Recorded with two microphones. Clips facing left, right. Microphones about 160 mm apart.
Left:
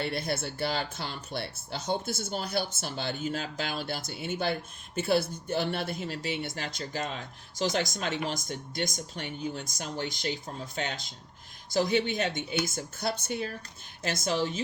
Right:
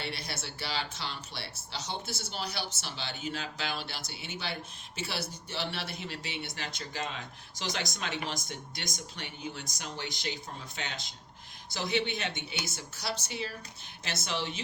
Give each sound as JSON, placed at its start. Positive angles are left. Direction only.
{"t": 0.0, "sound": "speech", "side_deg": 50}